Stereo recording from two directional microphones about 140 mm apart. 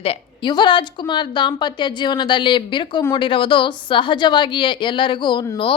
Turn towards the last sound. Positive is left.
turn(degrees=35)  # may be behind; listen again after turning